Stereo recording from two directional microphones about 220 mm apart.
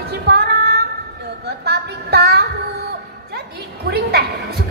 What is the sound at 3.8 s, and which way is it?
Music, 45° right (ahead or behind).